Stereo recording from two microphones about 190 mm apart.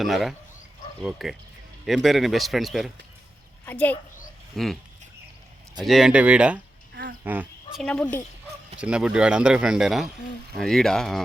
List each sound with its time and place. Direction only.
0.0 s speech: centre (ahead or behind)
5.8 s speech: centre (ahead or behind)
6.9 s a sound: 60° right (ahead or behind)
7.8 s speech: 5° left (ahead or behind)